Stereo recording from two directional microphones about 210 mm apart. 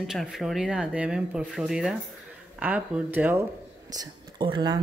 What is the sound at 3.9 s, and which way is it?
Speech, 20° right (ahead or behind).